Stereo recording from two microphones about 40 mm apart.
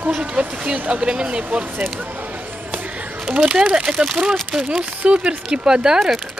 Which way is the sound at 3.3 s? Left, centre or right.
Right.